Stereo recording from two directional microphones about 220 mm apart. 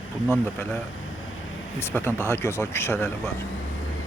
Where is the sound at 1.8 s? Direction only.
10° left (ahead or behind).